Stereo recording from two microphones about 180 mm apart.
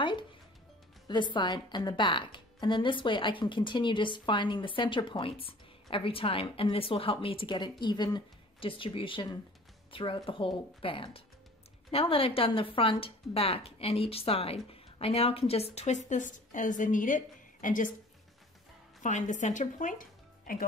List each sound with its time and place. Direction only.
1.0 s a woman's voice: 25° left (ahead or behind); by 17.9 s 45° left (ahead or behind)
19.0 s speech: 45° left (ahead or behind)